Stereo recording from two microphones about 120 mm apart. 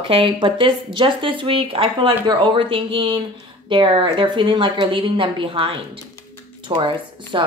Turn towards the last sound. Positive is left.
turn(degrees=-40)  # may be behind; listen again after turning